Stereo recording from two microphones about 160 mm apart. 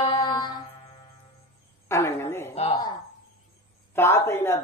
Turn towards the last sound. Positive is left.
turn(degrees=15)  # may be behind; listen again after turning